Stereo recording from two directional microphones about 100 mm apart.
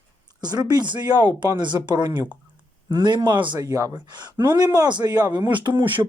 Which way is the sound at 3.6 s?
35° right (ahead or behind).